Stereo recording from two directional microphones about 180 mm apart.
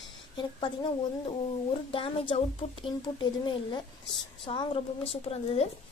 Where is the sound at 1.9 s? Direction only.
30° left (ahead or behind).